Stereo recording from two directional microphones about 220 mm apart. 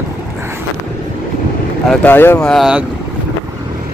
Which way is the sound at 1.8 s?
10° left (ahead or behind).